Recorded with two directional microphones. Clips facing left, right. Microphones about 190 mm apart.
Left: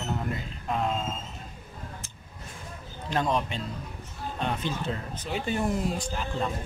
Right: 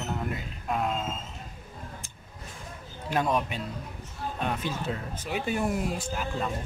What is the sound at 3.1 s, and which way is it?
Speech, 10° right (ahead or behind).